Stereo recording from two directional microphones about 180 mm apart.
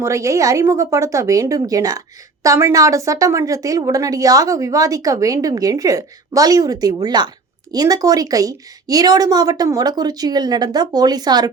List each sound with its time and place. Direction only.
0.0 s speech: 15° right (ahead or behind)